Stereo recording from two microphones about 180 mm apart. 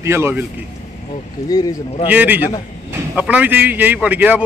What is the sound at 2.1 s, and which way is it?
Speech, 10° right (ahead or behind).